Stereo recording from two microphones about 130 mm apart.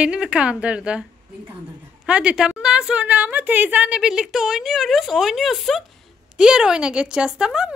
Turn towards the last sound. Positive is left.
turn(degrees=-5)  # may be behind; listen again after turning